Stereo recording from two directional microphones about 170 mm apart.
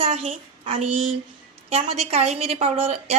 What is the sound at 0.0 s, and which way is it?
Speech, 40° right (ahead or behind).